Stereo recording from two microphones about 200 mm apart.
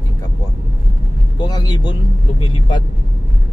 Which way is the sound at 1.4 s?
20° left (ahead or behind).